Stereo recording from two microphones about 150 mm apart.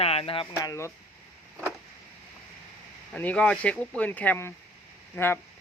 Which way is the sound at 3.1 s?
10° left (ahead or behind).